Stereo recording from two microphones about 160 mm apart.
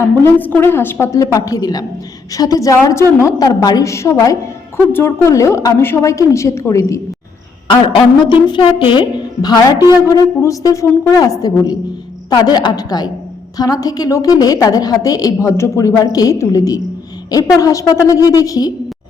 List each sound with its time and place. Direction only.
0.0 s a woman's voice: 15° left (ahead or behind)
7.7 s a woman's voice: 30° left (ahead or behind)